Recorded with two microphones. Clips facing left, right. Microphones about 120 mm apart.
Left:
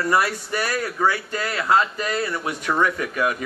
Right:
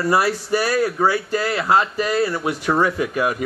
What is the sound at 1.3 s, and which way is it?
Speech, 25° right (ahead or behind).